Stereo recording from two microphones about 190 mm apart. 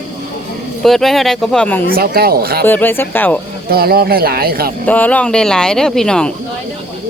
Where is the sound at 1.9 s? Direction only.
55° right (ahead or behind).